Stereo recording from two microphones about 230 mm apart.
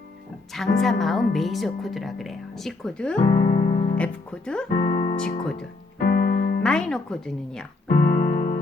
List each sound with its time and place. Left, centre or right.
0.5 s speech: centre
3.2 s music: left
3.9 s speech: centre
4.8 s speech: centre
6.0 s keyboard: left
6.6 s speech: centre
8.0 s music: left